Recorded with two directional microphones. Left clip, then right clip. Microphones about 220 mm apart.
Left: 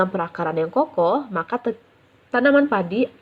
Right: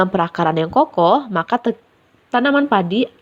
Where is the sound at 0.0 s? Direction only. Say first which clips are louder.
Right 6 dB; 35° right (ahead or behind).